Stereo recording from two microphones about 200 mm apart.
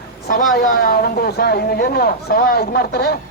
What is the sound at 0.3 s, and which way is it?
A woman's voice, 40° left (ahead or behind).